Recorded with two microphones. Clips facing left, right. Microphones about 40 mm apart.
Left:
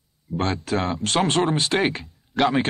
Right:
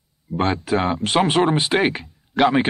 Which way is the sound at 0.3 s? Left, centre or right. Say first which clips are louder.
Right 4 dB; centre.